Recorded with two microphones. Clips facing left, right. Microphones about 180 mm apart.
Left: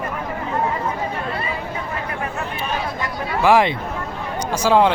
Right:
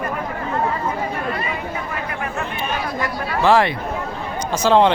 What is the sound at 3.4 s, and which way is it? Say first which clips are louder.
Speech: even; 15° left (ahead or behind).